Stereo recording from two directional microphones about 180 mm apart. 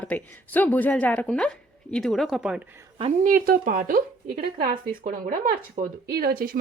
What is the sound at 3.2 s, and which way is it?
A woman's voice, 50° right (ahead or behind).